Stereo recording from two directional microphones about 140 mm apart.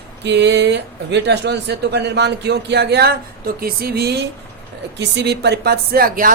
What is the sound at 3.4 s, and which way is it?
Speech, 90° right.